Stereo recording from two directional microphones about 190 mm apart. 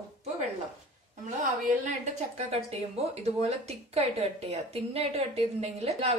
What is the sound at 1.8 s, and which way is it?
Speech, 35° right (ahead or behind).